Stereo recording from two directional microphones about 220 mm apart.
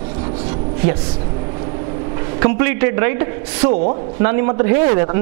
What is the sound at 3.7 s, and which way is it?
Speech, 40° right (ahead or behind).